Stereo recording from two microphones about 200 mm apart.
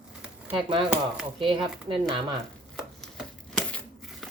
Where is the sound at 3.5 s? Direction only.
Centre (ahead or behind).